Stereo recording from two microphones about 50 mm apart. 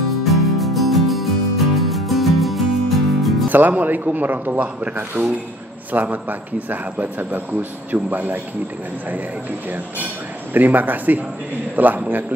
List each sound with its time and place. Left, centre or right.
0.2 s music: centre
3.4 s a man's voice: right
10.5 s a man's voice: right